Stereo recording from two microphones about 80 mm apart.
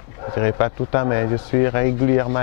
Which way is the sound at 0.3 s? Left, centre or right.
Centre.